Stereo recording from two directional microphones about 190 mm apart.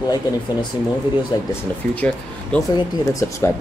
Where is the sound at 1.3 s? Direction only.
20° left (ahead or behind).